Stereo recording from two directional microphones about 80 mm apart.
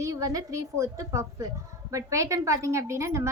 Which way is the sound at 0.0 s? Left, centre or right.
Right.